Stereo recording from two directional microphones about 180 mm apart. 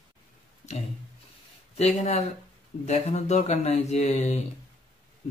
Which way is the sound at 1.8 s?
35° left (ahead or behind).